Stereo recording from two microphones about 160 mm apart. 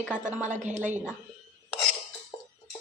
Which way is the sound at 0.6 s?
50° right (ahead or behind).